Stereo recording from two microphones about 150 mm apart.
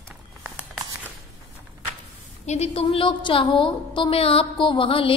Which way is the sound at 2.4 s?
45° left (ahead or behind).